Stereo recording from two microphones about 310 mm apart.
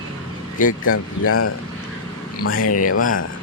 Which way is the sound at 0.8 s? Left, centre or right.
Left.